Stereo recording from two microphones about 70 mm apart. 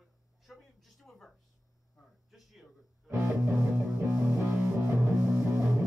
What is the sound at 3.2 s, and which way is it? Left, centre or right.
Music, right.